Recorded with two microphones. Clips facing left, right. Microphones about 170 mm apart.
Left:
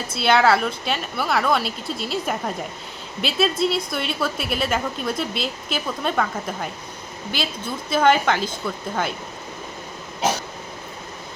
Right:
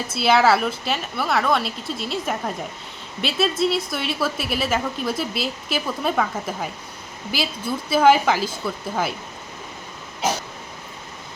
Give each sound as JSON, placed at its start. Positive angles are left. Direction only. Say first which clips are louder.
{"t": 0.1, "sound": "a woman's voice", "louder": "even", "side_deg": -5}